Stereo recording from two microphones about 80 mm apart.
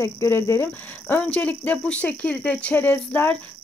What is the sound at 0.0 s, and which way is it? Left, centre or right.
Speech, left.